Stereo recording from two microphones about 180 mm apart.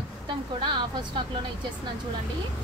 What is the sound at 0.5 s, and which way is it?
Speech, 25° right (ahead or behind).